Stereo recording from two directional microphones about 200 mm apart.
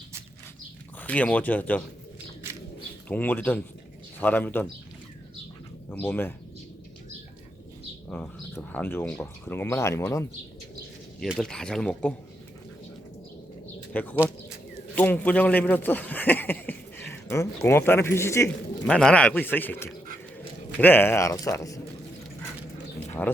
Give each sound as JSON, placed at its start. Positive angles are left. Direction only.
{"t": 0.9, "sound": "speech", "side_deg": 5}
{"t": 3.1, "sound": "speech", "side_deg": 10}
{"t": 5.9, "sound": "speech", "side_deg": 10}
{"t": 8.1, "sound": "speech", "side_deg": 10}
{"t": 11.2, "sound": "speech", "side_deg": 0}
{"t": 13.9, "sound": "speech", "side_deg": 10}
{"t": 23.2, "sound": "speech", "side_deg": 10}